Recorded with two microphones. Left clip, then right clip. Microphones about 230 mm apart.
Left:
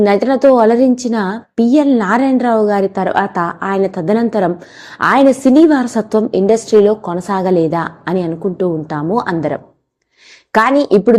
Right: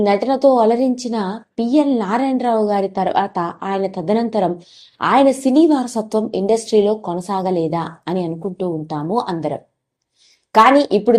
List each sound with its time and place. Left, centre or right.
0.0 s a woman's voice: left